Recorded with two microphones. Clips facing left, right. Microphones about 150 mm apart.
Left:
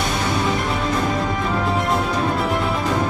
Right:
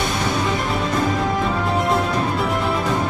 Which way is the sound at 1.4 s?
Centre (ahead or behind).